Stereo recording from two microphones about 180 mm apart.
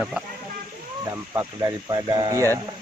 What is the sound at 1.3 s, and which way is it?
Speech, 20° right (ahead or behind).